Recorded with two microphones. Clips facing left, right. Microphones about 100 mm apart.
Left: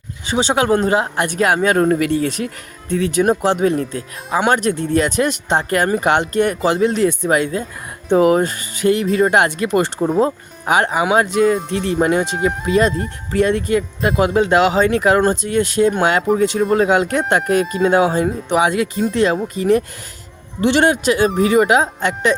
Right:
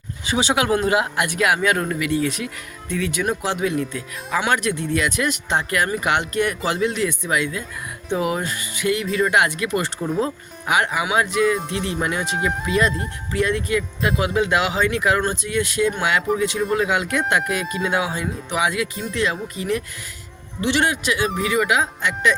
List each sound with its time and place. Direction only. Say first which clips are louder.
0.3 s speech: left 4 dB; 30° left (ahead or behind)